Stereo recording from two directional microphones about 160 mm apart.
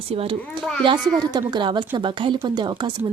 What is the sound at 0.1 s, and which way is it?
Speech, 35° right (ahead or behind).